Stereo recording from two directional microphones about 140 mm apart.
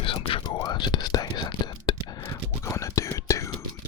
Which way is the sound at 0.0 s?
40° left (ahead or behind).